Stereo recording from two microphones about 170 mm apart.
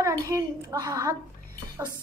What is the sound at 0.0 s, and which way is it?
A woman's voice, 20° right (ahead or behind).